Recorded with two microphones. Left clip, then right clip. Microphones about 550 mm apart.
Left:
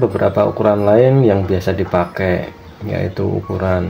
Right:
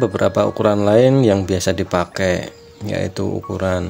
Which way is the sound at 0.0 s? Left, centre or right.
Right.